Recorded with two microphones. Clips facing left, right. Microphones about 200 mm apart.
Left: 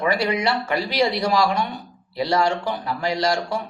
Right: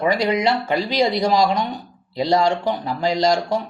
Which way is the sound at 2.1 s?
25° right (ahead or behind).